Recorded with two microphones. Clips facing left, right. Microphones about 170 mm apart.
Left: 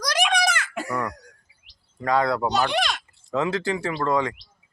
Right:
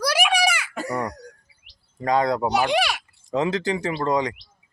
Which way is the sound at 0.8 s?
35° right (ahead or behind).